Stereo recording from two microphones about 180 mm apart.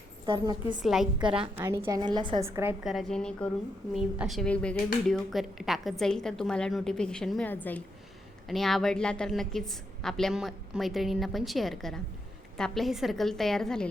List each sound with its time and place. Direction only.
0.3 s a woman's voice: 25° right (ahead or behind)
0.8 s a woman's voice: centre (ahead or behind)
1.4 s a woman's voice: 15° right (ahead or behind)
2.5 s a woman's voice: 15° right (ahead or behind)
2.8 s a woman's voice: centre (ahead or behind)